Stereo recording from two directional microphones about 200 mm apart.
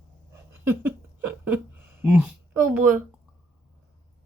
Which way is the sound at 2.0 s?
5° right (ahead or behind).